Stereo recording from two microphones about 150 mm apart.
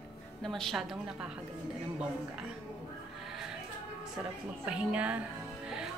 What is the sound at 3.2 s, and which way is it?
Music, centre (ahead or behind).